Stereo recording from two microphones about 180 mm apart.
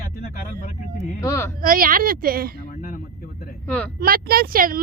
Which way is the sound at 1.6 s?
50° right (ahead or behind).